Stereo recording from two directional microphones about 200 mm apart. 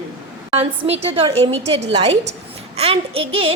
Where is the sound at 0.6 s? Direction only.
30° right (ahead or behind).